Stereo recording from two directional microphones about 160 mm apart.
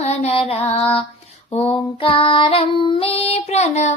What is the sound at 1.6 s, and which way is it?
Child singing, 35° left (ahead or behind).